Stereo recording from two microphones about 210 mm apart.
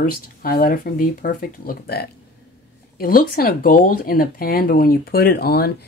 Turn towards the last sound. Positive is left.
turn(degrees=45)  # may be behind; listen again after turning